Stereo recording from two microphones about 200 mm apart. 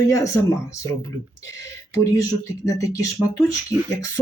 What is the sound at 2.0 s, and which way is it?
Speech, 15° left (ahead or behind).